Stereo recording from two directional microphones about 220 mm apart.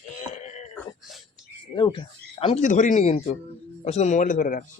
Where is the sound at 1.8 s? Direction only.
20° left (ahead or behind); by 4.7 s 40° left (ahead or behind).